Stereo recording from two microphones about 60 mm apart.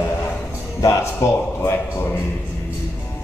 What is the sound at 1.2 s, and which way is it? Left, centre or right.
Speech, left.